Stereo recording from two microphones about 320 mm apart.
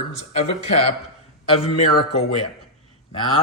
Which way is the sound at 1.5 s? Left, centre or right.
Centre.